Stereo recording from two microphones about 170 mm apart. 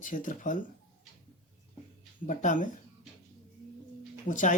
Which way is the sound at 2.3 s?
45° left (ahead or behind).